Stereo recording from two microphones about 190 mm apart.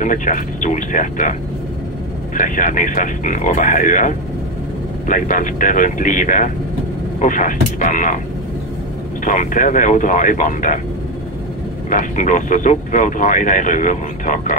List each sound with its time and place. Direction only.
0.0 s speech: 40° left (ahead or behind)
2.3 s speech: 45° left (ahead or behind)
9.2 s speech: 40° left (ahead or behind)
11.9 s speech: 40° left (ahead or behind)